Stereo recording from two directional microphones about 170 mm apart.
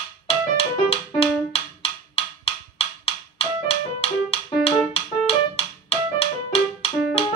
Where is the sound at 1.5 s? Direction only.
35° left (ahead or behind).